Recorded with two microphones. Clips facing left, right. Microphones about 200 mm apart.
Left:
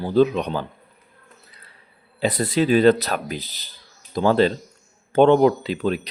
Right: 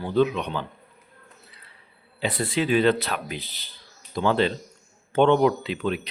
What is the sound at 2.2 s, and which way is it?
Speech, 40° left (ahead or behind).